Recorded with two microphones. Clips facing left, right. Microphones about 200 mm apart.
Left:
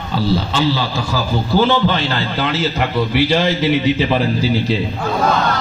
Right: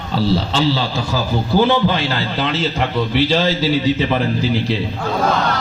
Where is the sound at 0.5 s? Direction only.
30° right (ahead or behind).